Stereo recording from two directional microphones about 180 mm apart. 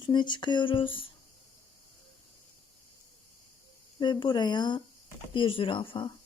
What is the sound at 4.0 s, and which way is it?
Speech, 25° left (ahead or behind).